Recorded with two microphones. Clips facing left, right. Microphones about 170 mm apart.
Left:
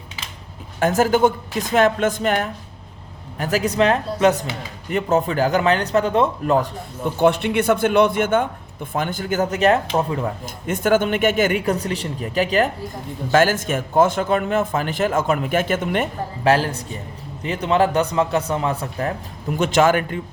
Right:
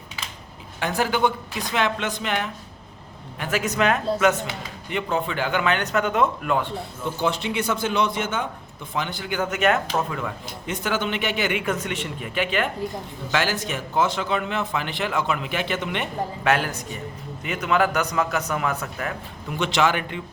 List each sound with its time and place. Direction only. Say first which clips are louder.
0.8 s speech: left 6 dB; 45° left (ahead or behind)
7.0 s speech: left 8 dB; 55° left (ahead or behind); by 10.3 s 35° left (ahead or behind)
10.4 s speech: left 7 dB; 50° left (ahead or behind)